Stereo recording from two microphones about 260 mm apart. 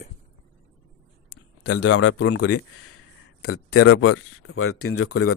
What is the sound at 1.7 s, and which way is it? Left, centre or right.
Speech, left.